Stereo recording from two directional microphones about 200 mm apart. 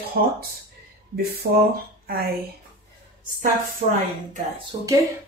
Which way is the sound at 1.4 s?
65° right (ahead or behind).